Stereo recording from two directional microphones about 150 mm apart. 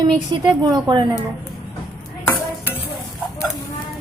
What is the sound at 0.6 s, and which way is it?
Speech, 25° right (ahead or behind).